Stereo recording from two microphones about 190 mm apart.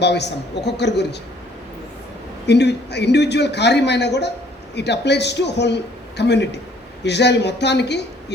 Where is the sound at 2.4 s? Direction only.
65° left (ahead or behind).